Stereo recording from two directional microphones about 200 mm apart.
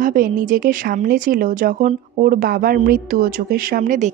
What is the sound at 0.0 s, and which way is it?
A woman's voice, 45° right (ahead or behind).